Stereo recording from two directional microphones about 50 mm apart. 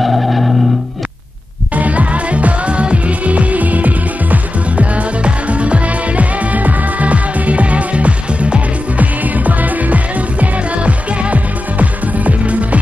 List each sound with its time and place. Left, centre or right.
0.0 s music: centre
1.8 s music: right